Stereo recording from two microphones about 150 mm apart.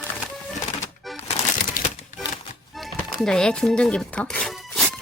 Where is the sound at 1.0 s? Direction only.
Centre (ahead or behind).